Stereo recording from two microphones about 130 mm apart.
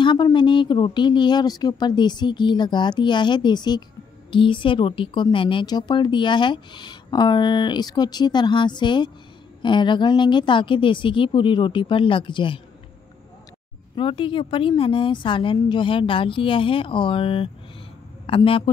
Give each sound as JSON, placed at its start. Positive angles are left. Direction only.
{"t": 0.0, "sound": "speech", "side_deg": 40}
{"t": 13.9, "sound": "speech", "side_deg": 40}